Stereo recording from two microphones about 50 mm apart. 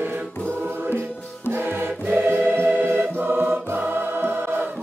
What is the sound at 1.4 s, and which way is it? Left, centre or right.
Music, right.